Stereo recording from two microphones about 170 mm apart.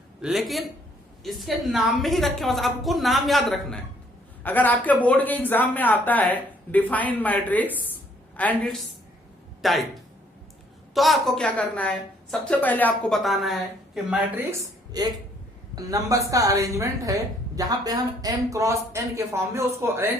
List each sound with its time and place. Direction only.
0.2 s a woman's voice: centre (ahead or behind)
10.9 s a woman's voice: centre (ahead or behind)
14.5 s a woman's voice: 25° right (ahead or behind)